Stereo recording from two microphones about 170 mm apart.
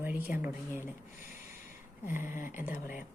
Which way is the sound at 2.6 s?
10° right (ahead or behind).